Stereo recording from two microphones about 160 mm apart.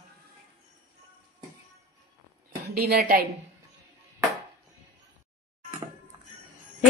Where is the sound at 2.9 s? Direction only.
70° right (ahead or behind).